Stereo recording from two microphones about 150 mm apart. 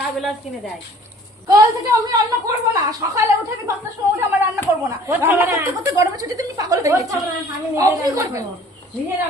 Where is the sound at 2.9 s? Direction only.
20° right (ahead or behind).